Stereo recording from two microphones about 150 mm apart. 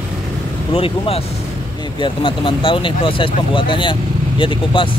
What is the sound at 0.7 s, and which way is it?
Speech, 40° left (ahead or behind).